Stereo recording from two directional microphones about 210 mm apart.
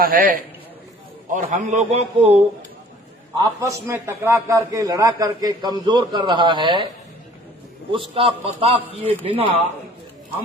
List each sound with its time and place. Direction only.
0.0 s a man's voice: 45° right (ahead or behind)
3.3 s a man's voice: 15° right (ahead or behind)
7.9 s a man's voice: 25° right (ahead or behind)